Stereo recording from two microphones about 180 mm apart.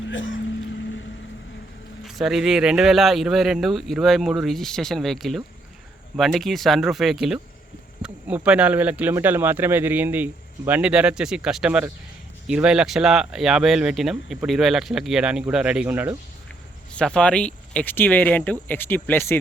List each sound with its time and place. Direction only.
0.1 s speech: 90° left
2.0 s speech: centre (ahead or behind)
16.9 s speech: 5° left (ahead or behind)